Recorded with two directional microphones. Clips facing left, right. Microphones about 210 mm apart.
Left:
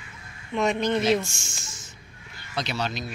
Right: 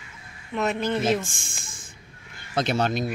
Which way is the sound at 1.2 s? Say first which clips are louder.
Even; 55° right (ahead or behind).